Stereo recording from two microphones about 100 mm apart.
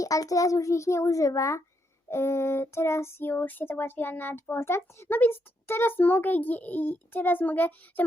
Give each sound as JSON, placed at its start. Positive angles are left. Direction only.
{"t": 0.0, "sound": "a child's voice", "side_deg": 35}
{"t": 2.0, "sound": "child singing", "side_deg": 25}